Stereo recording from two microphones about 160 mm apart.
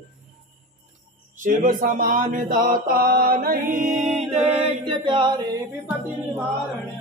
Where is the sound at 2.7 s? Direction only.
70° right (ahead or behind).